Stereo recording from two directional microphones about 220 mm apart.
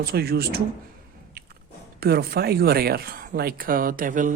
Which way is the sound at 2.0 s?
45° right (ahead or behind).